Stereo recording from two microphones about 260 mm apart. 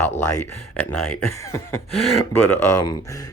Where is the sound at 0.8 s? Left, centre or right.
Centre.